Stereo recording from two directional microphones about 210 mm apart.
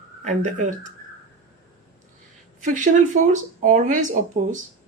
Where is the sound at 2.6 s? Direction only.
35° right (ahead or behind).